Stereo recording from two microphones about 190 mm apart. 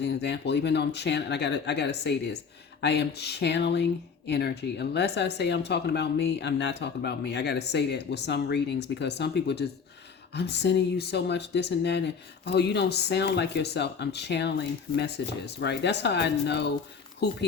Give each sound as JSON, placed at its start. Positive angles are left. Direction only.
{"t": 0.0, "sound": "speech", "side_deg": 60}